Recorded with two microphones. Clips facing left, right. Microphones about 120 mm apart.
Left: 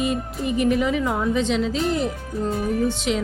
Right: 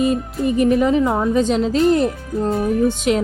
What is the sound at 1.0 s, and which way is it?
Speech, 25° right (ahead or behind).